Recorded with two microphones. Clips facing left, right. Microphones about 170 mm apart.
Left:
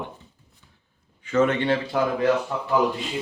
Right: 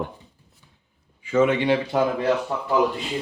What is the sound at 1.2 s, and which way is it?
Speech, 10° right (ahead or behind).